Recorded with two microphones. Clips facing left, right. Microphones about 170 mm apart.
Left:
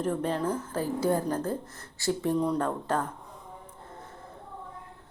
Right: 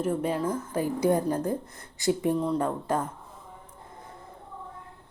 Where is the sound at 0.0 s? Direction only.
10° right (ahead or behind).